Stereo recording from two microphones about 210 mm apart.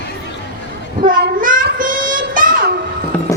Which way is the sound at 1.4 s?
40° right (ahead or behind).